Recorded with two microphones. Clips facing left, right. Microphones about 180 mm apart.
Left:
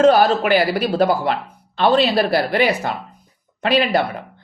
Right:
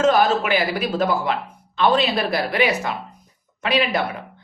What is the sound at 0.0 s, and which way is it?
Speech, 35° left (ahead or behind).